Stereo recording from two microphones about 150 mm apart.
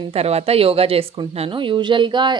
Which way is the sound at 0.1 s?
45° right (ahead or behind).